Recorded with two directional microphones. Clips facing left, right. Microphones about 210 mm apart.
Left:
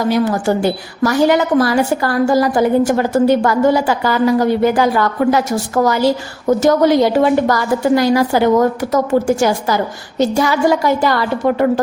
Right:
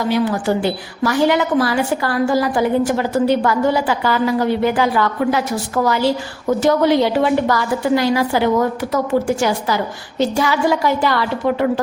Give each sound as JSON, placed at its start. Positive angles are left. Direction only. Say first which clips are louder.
{"t": 0.1, "sound": "a woman's voice", "louder": "left 1 dB", "side_deg": 45}